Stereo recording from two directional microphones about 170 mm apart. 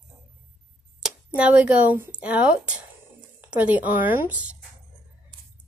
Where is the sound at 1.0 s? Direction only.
5° right (ahead or behind).